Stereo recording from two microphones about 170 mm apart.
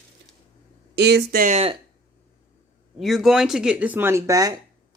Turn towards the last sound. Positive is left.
turn(degrees=-20)  # may be behind; listen again after turning